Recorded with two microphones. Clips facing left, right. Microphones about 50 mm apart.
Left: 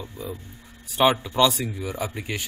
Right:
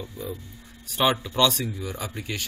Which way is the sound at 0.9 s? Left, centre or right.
Centre.